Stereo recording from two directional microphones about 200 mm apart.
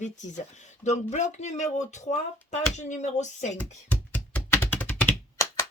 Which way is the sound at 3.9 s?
5° left (ahead or behind).